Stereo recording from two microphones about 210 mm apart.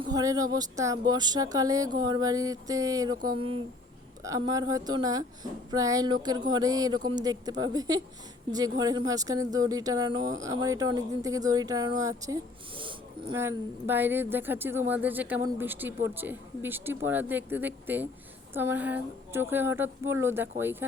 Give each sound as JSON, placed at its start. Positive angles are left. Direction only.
{"t": 0.0, "sound": "a woman's voice", "side_deg": -15}
{"t": 13.3, "sound": "speech", "side_deg": -10}